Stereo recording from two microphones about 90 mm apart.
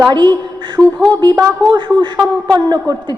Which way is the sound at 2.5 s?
45° right (ahead or behind).